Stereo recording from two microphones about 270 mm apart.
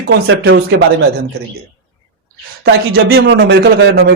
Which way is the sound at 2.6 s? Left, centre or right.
Right.